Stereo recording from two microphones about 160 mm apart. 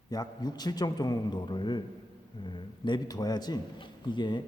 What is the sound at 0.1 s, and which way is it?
A man's voice, 25° left (ahead or behind).